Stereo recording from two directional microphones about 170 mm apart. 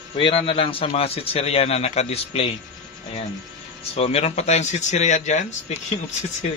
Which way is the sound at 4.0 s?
40° left (ahead or behind).